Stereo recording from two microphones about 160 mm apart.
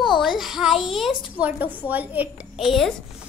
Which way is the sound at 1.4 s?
10° right (ahead or behind).